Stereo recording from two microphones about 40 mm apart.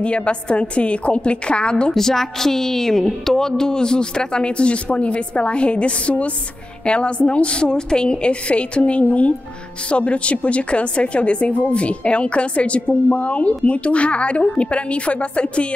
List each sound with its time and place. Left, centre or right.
0.0 s speech: left
2.0 s a woman's voice: centre; by 15.7 s left